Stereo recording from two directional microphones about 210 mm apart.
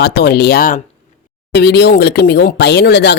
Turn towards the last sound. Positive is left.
turn(degrees=55)  # may be behind; listen again after turning